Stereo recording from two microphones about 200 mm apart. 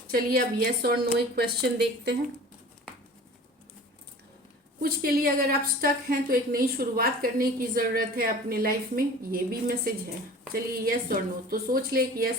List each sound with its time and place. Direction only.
0.1 s a woman's voice: 50° right (ahead or behind)
4.8 s a woman's voice: 45° right (ahead or behind)